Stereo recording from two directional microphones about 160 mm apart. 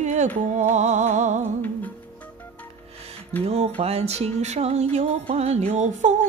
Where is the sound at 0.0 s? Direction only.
45° right (ahead or behind).